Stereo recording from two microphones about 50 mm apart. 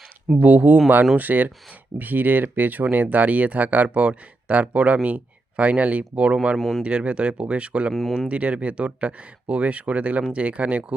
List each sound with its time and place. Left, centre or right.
0.3 s speech: right
6.6 s speech: centre
6.8 s speech: right
7.9 s speech: centre
8.3 s speech: right